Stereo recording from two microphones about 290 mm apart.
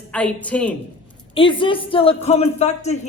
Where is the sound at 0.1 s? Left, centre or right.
Centre.